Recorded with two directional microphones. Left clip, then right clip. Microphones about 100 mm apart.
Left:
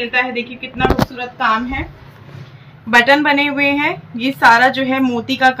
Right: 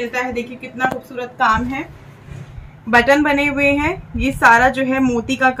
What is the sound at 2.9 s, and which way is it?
A woman's voice, 10° right (ahead or behind).